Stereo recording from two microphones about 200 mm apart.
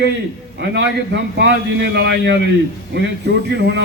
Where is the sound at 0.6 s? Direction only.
60° right (ahead or behind).